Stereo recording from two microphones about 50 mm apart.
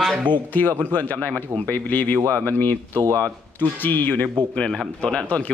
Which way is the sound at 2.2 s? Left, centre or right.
Right.